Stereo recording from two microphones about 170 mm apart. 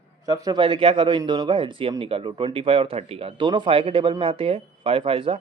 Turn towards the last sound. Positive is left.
turn(degrees=-30)  # may be behind; listen again after turning